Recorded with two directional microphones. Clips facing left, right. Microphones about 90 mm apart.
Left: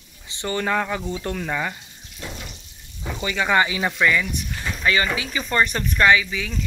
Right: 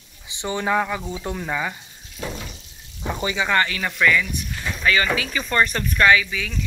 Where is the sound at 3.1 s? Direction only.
25° right (ahead or behind).